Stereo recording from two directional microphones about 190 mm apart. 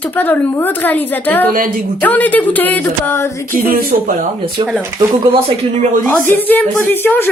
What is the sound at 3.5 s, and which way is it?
Speech, 50° right (ahead or behind).